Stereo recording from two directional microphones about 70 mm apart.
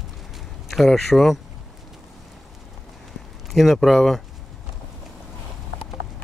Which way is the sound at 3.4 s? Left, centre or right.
Centre.